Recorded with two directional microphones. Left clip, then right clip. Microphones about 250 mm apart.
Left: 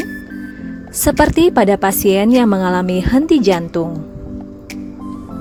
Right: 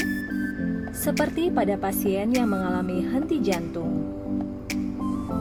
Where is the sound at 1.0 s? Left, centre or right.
Left.